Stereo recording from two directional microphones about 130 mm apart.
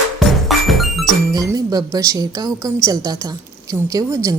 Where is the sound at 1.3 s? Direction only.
30° right (ahead or behind).